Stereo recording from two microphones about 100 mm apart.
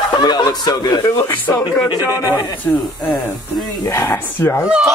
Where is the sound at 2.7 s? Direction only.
25° left (ahead or behind).